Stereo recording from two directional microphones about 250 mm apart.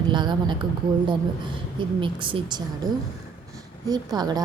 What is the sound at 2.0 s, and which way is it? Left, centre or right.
Speech, centre.